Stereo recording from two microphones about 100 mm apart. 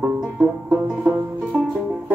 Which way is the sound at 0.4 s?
15° right (ahead or behind).